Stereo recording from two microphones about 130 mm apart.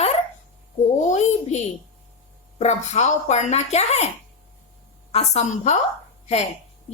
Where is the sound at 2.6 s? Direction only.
60° left (ahead or behind).